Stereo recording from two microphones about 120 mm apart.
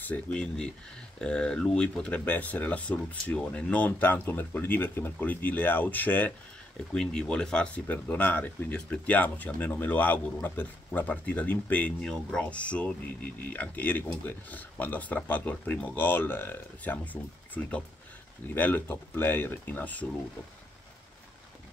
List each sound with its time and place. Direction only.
0.0 s speech: 10° left (ahead or behind)
18.5 s speech: 15° left (ahead or behind)